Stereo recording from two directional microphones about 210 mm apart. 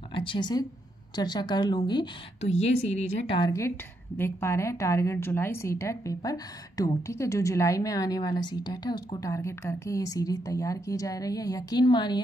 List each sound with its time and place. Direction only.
0.1 s a woman's voice: 25° left (ahead or behind)